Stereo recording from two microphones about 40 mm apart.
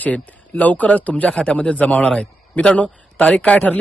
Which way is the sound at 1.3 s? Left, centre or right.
Left.